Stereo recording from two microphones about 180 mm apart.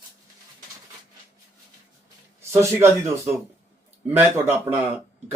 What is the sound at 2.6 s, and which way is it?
Speech, 15° right (ahead or behind).